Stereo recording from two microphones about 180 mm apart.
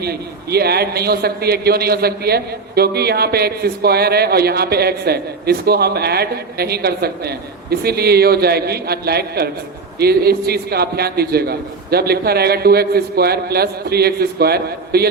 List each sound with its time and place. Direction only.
0.0 s a man's voice: 60° right (ahead or behind)